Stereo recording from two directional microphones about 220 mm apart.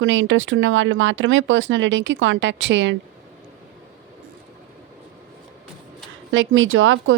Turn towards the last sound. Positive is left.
turn(degrees=-65)  # may be behind; listen again after turning